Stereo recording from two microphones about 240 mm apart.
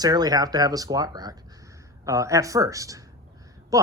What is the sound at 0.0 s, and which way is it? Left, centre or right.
Speech, centre.